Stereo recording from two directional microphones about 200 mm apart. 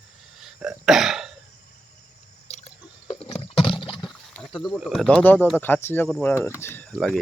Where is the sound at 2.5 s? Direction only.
30° left (ahead or behind).